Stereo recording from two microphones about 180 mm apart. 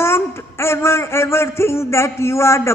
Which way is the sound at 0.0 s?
15° left (ahead or behind).